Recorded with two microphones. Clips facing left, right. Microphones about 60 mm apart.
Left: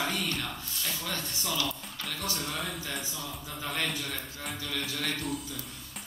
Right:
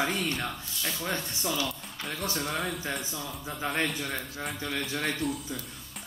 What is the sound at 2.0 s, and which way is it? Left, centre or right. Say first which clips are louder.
Music: right 3 dB; right.